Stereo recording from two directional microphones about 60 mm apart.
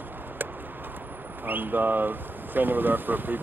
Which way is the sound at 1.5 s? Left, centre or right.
Right.